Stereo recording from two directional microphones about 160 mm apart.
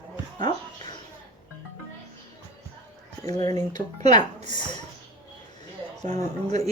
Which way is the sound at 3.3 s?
25° left (ahead or behind).